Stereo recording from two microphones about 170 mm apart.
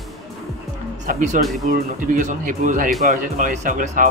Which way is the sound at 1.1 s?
45° right (ahead or behind).